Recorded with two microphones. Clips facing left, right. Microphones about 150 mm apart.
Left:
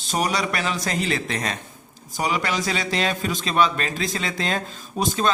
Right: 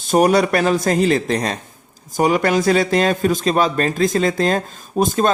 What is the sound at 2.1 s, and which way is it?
A man's voice, 50° right (ahead or behind).